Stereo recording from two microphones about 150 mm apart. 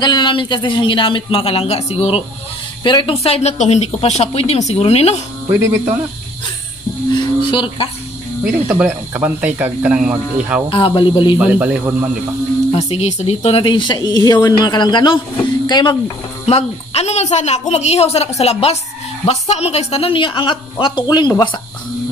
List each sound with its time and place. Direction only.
0.0 s speech: 30° left (ahead or behind)
2.8 s speech: 30° left (ahead or behind)
7.2 s a sound: 35° left (ahead or behind)
8.5 s speech: 10° right (ahead or behind)
10.7 s speech: 35° left (ahead or behind)
11.3 s speech: 10° right (ahead or behind)
12.7 s speech: 45° left (ahead or behind); by 16.0 s 30° left (ahead or behind)
16.4 s speech: 45° left (ahead or behind)